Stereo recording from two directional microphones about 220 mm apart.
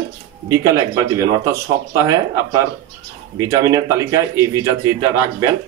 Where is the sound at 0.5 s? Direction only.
15° right (ahead or behind).